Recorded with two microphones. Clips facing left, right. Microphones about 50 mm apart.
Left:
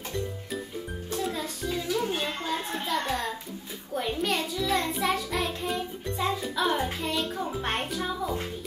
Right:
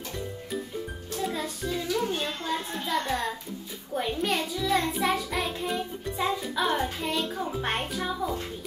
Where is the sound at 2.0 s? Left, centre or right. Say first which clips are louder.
Even; centre.